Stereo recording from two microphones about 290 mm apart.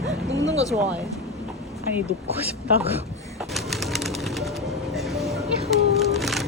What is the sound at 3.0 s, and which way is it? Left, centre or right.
Bird, centre.